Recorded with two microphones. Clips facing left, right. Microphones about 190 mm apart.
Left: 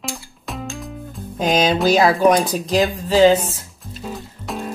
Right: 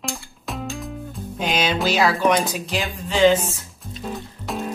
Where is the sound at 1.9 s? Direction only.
40° left (ahead or behind).